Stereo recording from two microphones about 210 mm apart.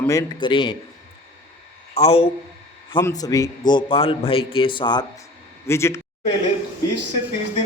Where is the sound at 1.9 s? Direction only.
30° left (ahead or behind).